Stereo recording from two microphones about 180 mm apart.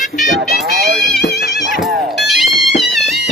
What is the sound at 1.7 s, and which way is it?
Music, centre (ahead or behind).